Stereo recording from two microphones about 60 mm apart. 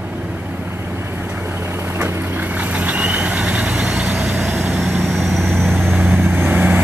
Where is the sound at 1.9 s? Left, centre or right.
Right.